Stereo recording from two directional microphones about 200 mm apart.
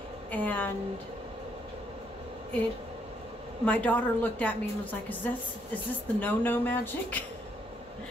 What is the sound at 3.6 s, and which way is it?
A woman's voice, 10° left (ahead or behind).